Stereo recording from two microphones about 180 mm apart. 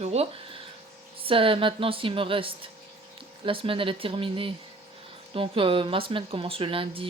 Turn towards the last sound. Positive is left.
turn(degrees=-30)  # may be behind; listen again after turning